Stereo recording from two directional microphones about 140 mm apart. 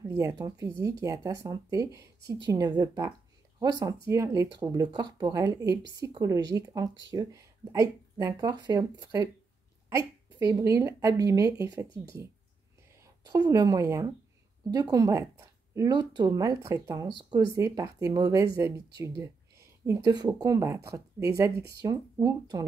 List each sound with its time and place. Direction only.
0.1 s speech: 25° right (ahead or behind)
13.2 s speech: 30° right (ahead or behind)